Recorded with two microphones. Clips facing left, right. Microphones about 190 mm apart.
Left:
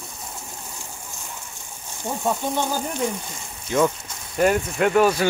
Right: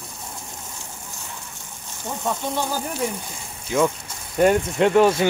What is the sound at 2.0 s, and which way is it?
Speech, 15° left (ahead or behind).